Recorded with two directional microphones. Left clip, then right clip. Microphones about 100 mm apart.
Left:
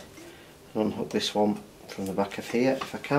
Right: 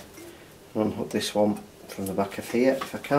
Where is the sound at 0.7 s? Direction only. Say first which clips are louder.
Right 1 dB; 20° left (ahead or behind).